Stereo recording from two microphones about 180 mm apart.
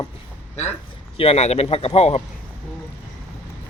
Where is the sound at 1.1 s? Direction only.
35° left (ahead or behind).